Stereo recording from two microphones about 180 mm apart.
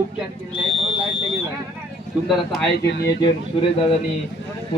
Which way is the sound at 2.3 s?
Centre (ahead or behind).